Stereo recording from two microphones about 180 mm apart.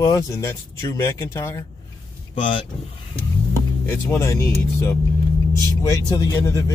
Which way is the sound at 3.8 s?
15° left (ahead or behind).